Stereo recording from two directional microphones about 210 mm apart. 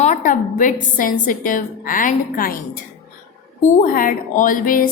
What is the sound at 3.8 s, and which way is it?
A woman's voice, 40° left (ahead or behind).